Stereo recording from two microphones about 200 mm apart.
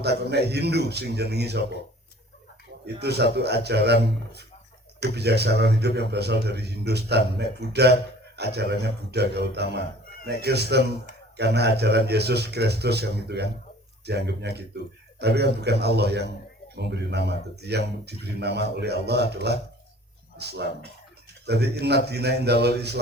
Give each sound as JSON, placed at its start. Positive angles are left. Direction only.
{"t": 0.0, "sound": "a man's voice", "side_deg": -55}
{"t": 2.8, "sound": "a man's voice", "side_deg": -55}